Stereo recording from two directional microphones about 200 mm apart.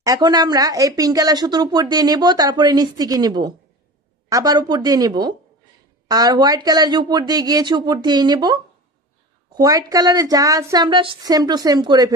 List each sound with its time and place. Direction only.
0.0 s speech: 20° right (ahead or behind)
9.6 s speech: 20° right (ahead or behind)